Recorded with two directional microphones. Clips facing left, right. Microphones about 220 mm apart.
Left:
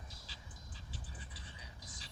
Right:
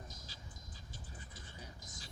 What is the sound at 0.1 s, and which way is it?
Train, 45° right (ahead or behind).